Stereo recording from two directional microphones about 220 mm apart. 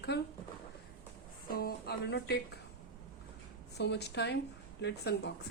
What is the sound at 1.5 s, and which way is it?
Speech, 45° left (ahead or behind).